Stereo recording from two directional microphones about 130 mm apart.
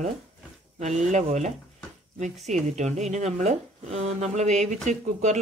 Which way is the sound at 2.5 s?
65° right (ahead or behind).